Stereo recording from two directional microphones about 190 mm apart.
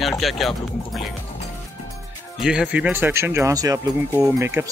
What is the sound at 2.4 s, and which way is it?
Speech, 5° right (ahead or behind).